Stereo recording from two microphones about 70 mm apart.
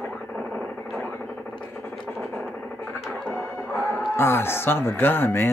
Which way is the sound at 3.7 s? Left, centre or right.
Left.